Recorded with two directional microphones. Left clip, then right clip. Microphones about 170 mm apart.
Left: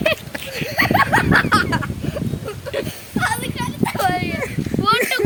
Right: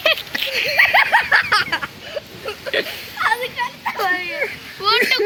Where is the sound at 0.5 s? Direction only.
50° left (ahead or behind).